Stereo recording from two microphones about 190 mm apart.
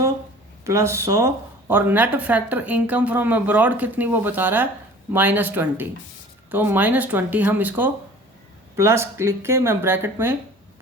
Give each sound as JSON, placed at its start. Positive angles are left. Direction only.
{"t": 0.6, "sound": "speech", "side_deg": -15}